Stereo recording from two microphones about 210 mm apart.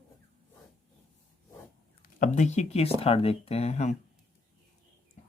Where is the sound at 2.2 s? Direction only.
35° left (ahead or behind).